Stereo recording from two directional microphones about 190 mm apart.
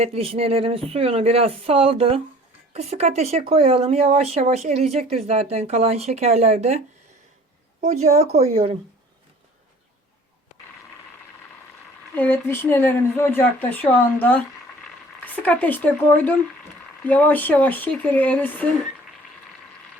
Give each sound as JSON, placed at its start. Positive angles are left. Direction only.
{"t": 0.0, "sound": "speech", "side_deg": -30}
{"t": 12.1, "sound": "speech", "side_deg": 10}